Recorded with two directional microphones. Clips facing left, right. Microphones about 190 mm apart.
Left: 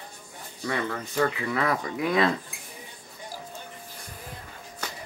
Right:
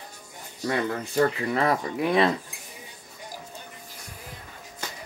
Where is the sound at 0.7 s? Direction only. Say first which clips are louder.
Right 3 dB; 35° right (ahead or behind).